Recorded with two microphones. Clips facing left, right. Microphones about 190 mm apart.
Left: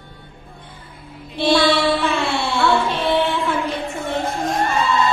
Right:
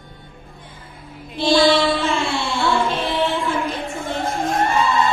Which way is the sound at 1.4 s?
60° left (ahead or behind).